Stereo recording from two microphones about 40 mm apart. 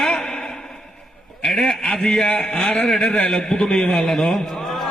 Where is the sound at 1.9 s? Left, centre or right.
Left.